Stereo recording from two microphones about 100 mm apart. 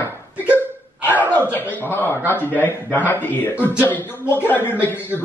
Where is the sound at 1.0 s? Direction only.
20° left (ahead or behind).